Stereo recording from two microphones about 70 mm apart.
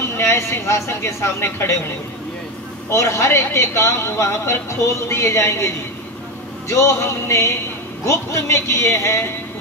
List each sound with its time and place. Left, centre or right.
0.2 s speech: left
2.9 s speech: left
6.7 s speech: left